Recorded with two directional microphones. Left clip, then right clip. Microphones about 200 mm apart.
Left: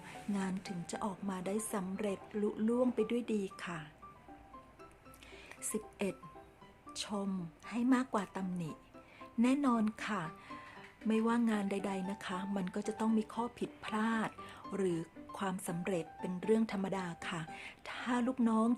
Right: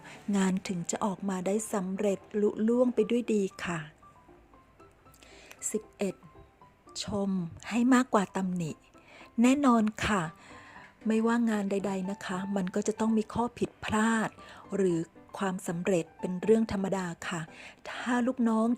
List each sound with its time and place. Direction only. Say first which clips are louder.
0.3 s a woman's voice: right 11 dB; 40° right (ahead or behind)
5.6 s a woman's voice: right 6 dB; 25° right (ahead or behind)
7.2 s a woman's voice: right 8 dB; 35° right (ahead or behind)